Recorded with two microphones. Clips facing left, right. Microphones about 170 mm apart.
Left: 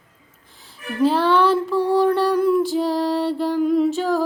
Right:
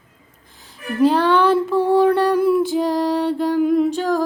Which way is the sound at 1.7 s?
25° right (ahead or behind).